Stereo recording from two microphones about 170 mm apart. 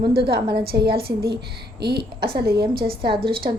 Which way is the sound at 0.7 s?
70° right (ahead or behind).